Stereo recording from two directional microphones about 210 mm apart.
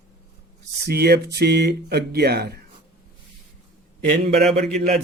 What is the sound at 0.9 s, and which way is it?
Speech, 50° right (ahead or behind).